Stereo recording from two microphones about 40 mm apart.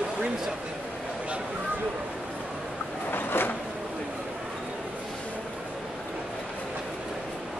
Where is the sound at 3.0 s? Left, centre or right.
Left.